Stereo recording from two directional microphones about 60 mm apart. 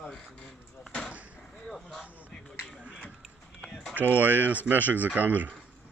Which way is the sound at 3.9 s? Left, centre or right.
Right.